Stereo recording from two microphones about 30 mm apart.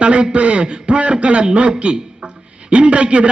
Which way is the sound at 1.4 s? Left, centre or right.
Right.